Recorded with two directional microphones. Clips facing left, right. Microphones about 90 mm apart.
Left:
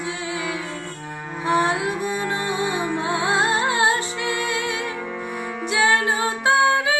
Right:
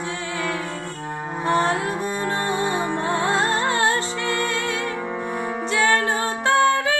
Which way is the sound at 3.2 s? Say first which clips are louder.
Left 2 dB; 10° left (ahead or behind).